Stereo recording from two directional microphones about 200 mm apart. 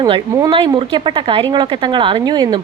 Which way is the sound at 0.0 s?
20° right (ahead or behind).